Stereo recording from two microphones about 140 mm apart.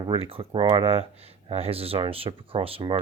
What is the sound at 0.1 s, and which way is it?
Speech, 40° right (ahead or behind).